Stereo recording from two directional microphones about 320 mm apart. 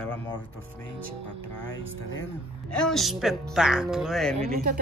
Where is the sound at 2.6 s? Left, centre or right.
Centre.